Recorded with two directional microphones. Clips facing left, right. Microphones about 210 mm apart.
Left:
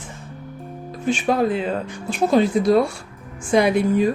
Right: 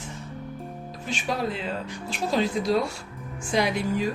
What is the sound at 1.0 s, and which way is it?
Speech, 50° left (ahead or behind).